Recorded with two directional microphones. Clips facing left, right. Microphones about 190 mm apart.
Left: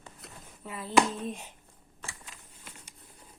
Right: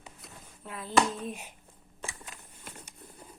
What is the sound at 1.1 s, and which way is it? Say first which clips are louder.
Speech: left 1 dB; 5° right (ahead or behind).